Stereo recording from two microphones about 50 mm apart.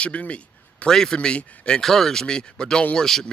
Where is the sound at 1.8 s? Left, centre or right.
Centre.